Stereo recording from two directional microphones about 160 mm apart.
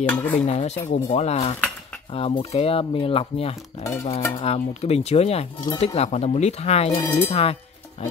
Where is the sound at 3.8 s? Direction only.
20° left (ahead or behind).